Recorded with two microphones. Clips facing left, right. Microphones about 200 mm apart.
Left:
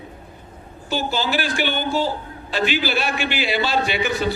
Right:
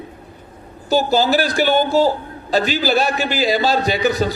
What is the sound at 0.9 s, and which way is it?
A man's voice, 40° right (ahead or behind).